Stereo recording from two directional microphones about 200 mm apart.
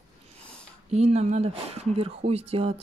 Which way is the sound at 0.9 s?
35° right (ahead or behind).